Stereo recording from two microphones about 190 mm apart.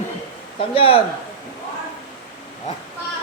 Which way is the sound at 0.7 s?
30° left (ahead or behind).